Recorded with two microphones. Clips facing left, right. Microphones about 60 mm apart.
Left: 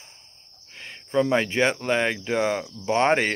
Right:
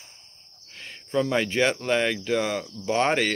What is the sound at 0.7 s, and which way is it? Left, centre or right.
Speech, centre.